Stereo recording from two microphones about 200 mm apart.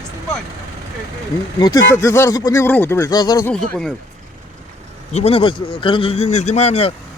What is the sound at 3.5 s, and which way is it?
Speech, 5° left (ahead or behind).